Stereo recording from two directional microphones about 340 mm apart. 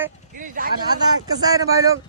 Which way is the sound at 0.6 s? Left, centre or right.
Right.